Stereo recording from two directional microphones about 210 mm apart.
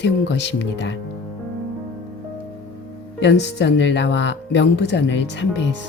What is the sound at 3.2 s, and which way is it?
Speech, 55° left (ahead or behind).